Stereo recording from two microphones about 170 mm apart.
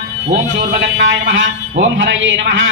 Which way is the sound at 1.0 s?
90° right.